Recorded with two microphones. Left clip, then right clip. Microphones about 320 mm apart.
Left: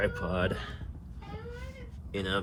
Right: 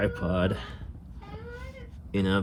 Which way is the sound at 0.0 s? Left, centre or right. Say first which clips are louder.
Right 2 dB; right.